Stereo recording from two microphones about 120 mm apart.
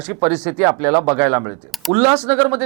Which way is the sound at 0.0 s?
20° right (ahead or behind).